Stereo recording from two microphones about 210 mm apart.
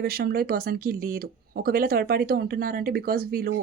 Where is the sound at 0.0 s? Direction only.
45° right (ahead or behind).